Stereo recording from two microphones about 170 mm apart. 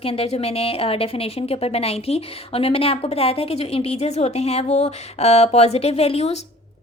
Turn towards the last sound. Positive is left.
turn(degrees=40)  # may be behind; listen again after turning